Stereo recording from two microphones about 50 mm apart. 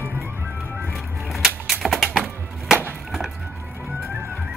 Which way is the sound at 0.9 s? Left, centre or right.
Centre.